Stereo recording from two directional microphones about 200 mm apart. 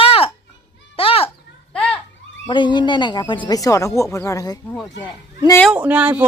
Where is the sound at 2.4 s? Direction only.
25° left (ahead or behind).